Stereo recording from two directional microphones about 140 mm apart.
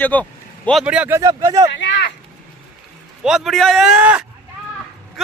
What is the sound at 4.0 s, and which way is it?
Speech, 10° right (ahead or behind).